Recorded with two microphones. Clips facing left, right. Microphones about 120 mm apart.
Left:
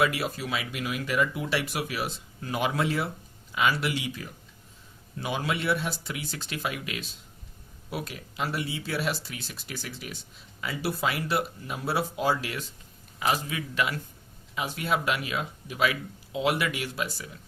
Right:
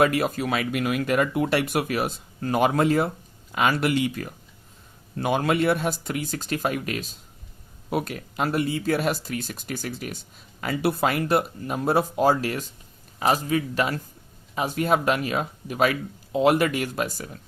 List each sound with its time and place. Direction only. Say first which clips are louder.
0.0 s a man's voice: right 6 dB; 50° right (ahead or behind)